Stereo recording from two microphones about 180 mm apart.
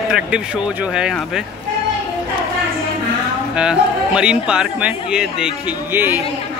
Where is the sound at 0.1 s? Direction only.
5° right (ahead or behind).